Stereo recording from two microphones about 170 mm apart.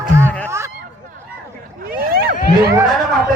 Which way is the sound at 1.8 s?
60° right (ahead or behind).